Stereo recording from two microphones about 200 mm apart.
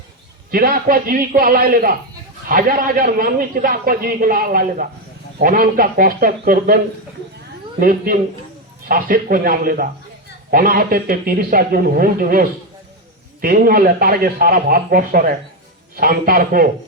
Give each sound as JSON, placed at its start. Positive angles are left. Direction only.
{"t": 0.5, "sound": "a man's voice", "side_deg": -45}
{"t": 7.8, "sound": "a man's voice", "side_deg": -45}